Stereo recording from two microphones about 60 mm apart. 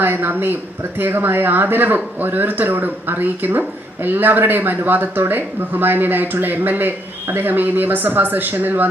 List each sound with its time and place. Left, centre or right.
0.0 s speech: right